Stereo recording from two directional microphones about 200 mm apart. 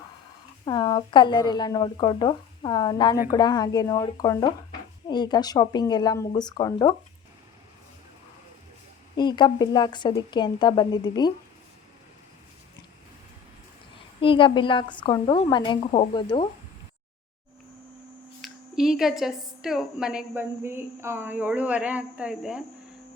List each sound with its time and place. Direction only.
0.6 s speech: 20° left (ahead or behind)
9.1 s speech: 20° left (ahead or behind)
14.2 s speech: 25° left (ahead or behind)
18.4 s a woman's voice: centre (ahead or behind)